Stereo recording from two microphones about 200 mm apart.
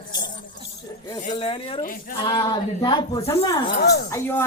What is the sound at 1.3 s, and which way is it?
Speech, 25° left (ahead or behind).